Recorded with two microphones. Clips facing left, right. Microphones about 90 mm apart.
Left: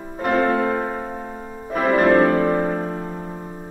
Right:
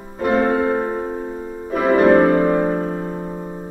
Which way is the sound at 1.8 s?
25° right (ahead or behind).